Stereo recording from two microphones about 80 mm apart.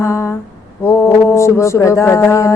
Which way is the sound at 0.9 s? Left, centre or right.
Left.